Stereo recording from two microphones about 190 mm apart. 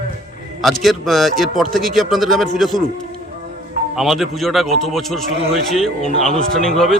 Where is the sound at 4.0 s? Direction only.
Centre (ahead or behind).